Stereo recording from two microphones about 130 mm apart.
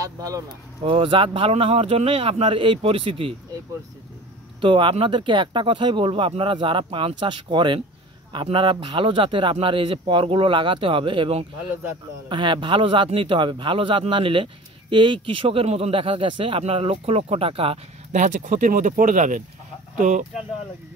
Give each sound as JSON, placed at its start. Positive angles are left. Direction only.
{"t": 0.0, "sound": "a sound", "side_deg": -25}
{"t": 0.8, "sound": "speech", "side_deg": -40}
{"t": 4.6, "sound": "a man's voice", "side_deg": -40}
{"t": 18.1, "sound": "speech", "side_deg": -80}